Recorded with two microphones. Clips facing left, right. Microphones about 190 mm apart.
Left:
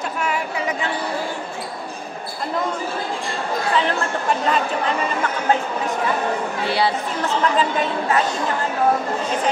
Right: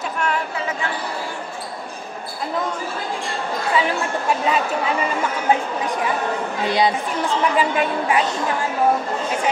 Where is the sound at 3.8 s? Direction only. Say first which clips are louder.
Right 2 dB; 10° right (ahead or behind).